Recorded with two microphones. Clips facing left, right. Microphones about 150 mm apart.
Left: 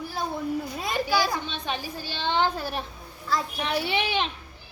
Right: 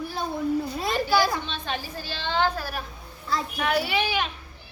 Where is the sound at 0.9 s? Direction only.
15° left (ahead or behind).